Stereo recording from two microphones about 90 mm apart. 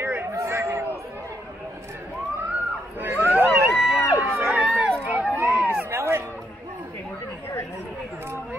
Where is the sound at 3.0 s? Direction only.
20° right (ahead or behind).